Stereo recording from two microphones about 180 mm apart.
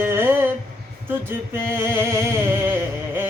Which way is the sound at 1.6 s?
15° right (ahead or behind).